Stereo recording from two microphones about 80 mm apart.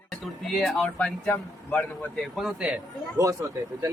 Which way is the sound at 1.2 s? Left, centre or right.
Left.